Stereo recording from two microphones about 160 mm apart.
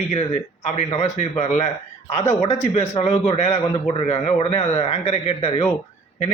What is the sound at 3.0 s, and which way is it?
Speech, 40° left (ahead or behind).